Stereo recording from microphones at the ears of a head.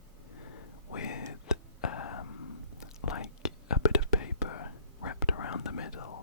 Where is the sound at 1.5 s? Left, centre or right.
Left.